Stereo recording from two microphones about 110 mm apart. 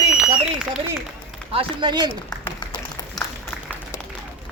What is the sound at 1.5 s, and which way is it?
Speech, 45° right (ahead or behind).